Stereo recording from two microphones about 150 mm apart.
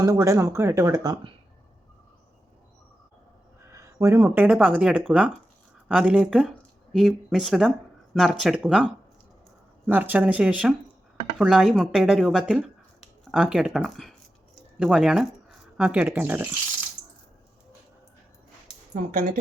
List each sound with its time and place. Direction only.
0.0 s speech: 20° right (ahead or behind)
3.7 s speech: 20° right (ahead or behind)
18.9 s speech: 70° right (ahead or behind)